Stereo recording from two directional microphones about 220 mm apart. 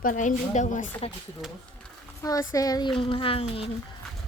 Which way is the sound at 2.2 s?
15° left (ahead or behind).